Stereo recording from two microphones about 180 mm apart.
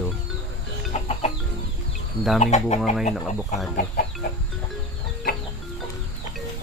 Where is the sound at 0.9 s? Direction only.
35° left (ahead or behind).